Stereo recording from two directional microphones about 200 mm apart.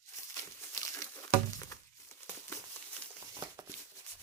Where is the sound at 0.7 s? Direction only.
15° left (ahead or behind).